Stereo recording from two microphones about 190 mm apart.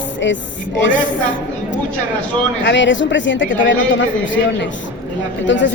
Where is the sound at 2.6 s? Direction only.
70° left (ahead or behind).